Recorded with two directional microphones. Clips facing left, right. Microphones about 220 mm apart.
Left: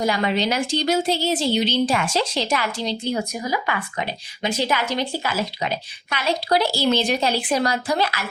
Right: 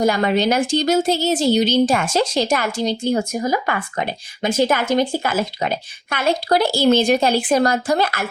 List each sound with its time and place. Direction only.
0.0 s speech: 45° right (ahead or behind)